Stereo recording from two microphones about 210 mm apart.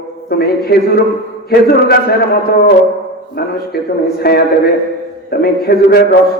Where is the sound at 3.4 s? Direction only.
50° left (ahead or behind).